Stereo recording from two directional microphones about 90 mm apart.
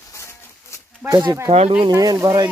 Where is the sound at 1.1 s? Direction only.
55° right (ahead or behind).